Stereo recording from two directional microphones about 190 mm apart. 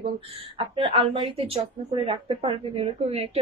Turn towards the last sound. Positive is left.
turn(degrees=-30)  # may be behind; listen again after turning